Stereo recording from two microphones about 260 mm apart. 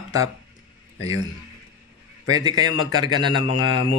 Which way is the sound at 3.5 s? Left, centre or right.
Left.